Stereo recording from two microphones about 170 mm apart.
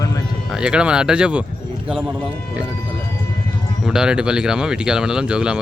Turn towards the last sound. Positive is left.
turn(degrees=-5)  # may be behind; listen again after turning